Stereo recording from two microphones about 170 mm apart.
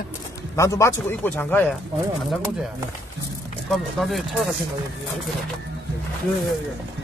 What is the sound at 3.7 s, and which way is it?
Speech, centre (ahead or behind).